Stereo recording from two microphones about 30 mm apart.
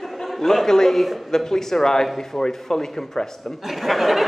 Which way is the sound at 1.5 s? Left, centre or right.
Centre.